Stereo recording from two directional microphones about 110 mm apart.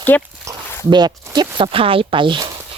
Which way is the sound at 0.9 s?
40° right (ahead or behind).